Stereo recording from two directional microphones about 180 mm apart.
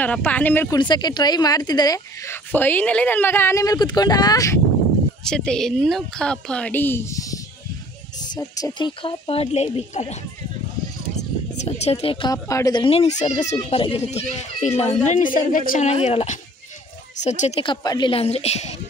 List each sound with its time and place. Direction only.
0.0 s speech: 10° left (ahead or behind)
0.7 s speech: 25° left (ahead or behind)
5.2 s a woman's voice: 5° left (ahead or behind)
8.4 s speech: 20° left (ahead or behind); by 10.1 s 40° left (ahead or behind)
11.1 s speech: 40° left (ahead or behind); by 12.8 s 20° left (ahead or behind)
12.8 s a woman's voice: 35° left (ahead or behind)